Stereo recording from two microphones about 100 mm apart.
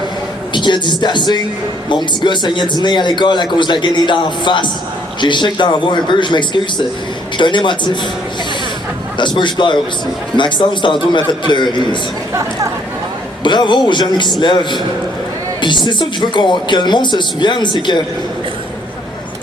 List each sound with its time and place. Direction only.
0.5 s a man's voice: 50° left (ahead or behind)
9.1 s a man's voice: 50° left (ahead or behind)
13.4 s a man's voice: 50° left (ahead or behind)